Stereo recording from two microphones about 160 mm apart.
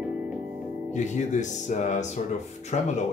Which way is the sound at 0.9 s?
50° left (ahead or behind).